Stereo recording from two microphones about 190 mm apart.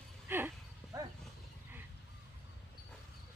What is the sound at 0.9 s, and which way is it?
Dog, 20° right (ahead or behind).